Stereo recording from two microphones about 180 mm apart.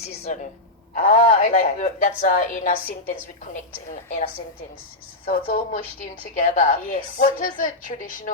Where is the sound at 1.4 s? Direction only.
50° left (ahead or behind).